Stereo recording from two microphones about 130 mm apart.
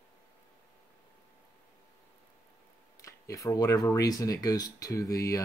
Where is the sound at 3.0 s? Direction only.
25° left (ahead or behind).